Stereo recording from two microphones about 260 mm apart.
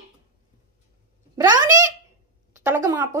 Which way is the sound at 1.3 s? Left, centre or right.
Centre.